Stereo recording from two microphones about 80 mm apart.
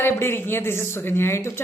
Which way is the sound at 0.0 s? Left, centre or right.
Left.